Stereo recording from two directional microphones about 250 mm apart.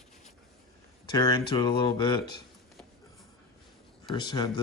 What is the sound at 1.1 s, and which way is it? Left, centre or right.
Speech, centre.